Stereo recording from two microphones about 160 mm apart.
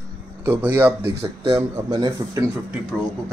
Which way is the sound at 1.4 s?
25° right (ahead or behind).